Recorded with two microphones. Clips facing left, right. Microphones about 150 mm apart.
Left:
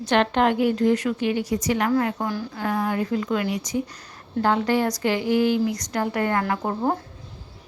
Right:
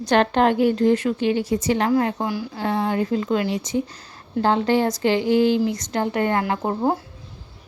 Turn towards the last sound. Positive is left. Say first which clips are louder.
# right 2 dB
turn(degrees=-20)  # may be behind; listen again after turning